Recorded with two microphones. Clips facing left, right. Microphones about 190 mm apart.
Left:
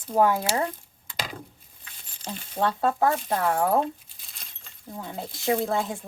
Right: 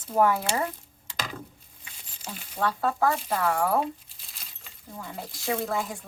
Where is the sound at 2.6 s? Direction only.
25° left (ahead or behind).